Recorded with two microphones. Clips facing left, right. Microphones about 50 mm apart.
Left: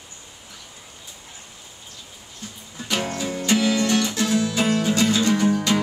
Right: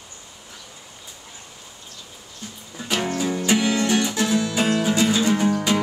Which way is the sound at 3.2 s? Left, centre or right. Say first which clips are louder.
Right 1 dB; centre.